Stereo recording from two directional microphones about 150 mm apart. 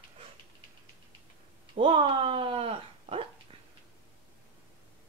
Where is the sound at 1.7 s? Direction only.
35° right (ahead or behind).